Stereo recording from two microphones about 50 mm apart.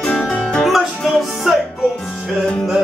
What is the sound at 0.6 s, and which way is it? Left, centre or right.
Music, centre.